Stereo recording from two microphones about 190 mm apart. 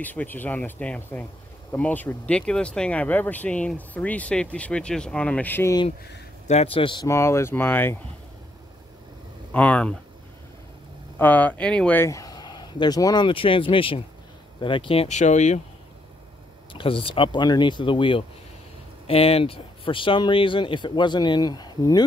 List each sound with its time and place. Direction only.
0.0 s speech: 10° left (ahead or behind)
6.4 s speech: 35° left (ahead or behind); by 8.0 s 10° left (ahead or behind)
9.5 s speech: 5° left (ahead or behind)
11.1 s speech: 10° left (ahead or behind); by 15.6 s 40° left (ahead or behind)
16.7 s speech: 30° left (ahead or behind)